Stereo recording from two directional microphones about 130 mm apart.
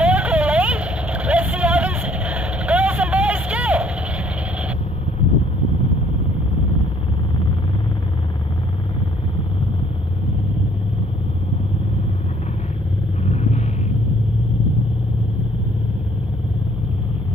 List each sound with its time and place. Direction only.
0.0 s vehicle: 10° right (ahead or behind)
13.2 s vehicle: 60° left (ahead or behind)